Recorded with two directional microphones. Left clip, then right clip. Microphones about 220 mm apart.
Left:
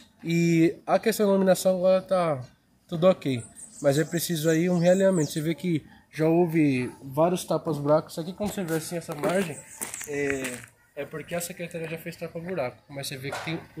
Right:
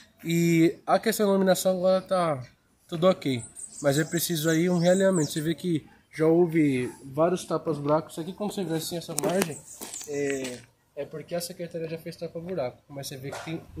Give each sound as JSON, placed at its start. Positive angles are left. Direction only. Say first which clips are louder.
{"t": 0.2, "sound": "a man's voice", "louder": "even", "side_deg": 0}
{"t": 6.1, "sound": "speech", "louder": "right 1 dB", "side_deg": 45}
{"t": 8.4, "sound": "a man's voice", "louder": "even", "side_deg": 15}
{"t": 8.7, "sound": "speech", "louder": "left 1 dB", "side_deg": 0}